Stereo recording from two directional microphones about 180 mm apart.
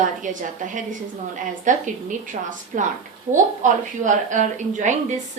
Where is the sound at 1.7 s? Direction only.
45° right (ahead or behind).